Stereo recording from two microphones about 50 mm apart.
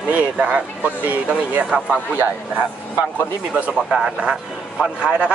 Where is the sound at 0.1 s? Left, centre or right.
Right.